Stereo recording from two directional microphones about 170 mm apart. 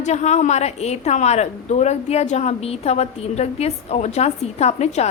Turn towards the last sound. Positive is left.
turn(degrees=40)  # may be behind; listen again after turning